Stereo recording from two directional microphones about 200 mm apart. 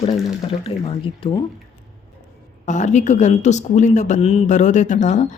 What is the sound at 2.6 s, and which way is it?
Speech, 35° left (ahead or behind).